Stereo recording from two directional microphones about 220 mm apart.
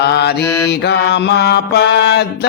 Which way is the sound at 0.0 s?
50° left (ahead or behind).